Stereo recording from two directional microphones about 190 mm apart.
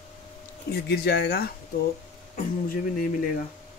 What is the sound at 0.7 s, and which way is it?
Speech, 55° left (ahead or behind).